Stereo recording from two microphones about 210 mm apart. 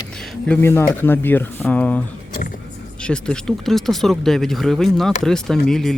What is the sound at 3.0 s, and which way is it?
Speech, 5° left (ahead or behind).